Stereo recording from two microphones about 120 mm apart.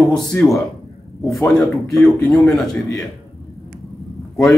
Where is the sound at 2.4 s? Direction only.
Centre (ahead or behind).